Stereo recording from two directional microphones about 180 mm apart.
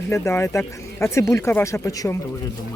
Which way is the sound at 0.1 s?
15° left (ahead or behind).